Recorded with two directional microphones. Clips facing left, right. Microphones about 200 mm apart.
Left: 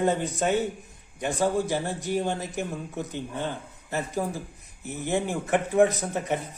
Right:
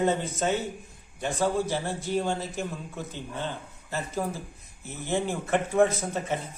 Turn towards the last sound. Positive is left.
turn(degrees=15)  # may be behind; listen again after turning